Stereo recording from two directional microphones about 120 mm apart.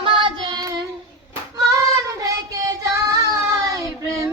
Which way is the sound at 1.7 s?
25° right (ahead or behind).